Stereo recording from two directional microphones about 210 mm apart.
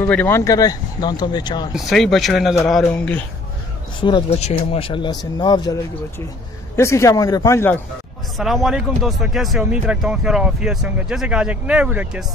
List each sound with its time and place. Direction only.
0.0 s speech: 10° left (ahead or behind)
1.7 s speech: centre (ahead or behind)
4.0 s speech: 25° left (ahead or behind)
6.8 s speech: 15° left (ahead or behind)
8.4 s speech: centre (ahead or behind)